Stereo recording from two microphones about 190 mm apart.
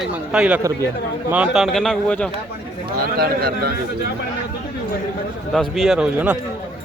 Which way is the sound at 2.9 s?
55° right (ahead or behind).